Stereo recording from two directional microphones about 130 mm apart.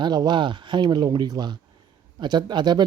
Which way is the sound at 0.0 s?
35° right (ahead or behind).